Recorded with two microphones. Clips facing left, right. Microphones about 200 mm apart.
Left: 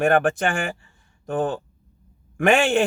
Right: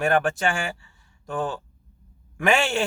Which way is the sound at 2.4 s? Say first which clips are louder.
Left 4 dB; 50° left (ahead or behind).